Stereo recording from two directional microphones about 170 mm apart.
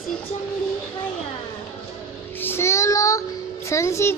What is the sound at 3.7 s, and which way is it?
Speech, 15° left (ahead or behind).